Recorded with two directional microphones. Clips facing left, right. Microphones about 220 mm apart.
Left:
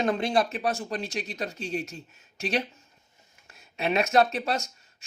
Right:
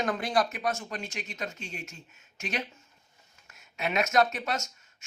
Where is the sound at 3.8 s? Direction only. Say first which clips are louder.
Left 3 dB; 30° left (ahead or behind).